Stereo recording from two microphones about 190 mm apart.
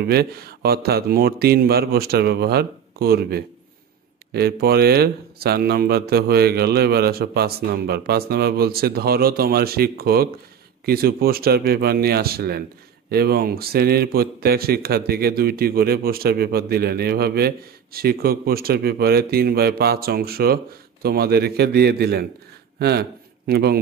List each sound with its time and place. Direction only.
0.0 s a man's voice: 55° right (ahead or behind)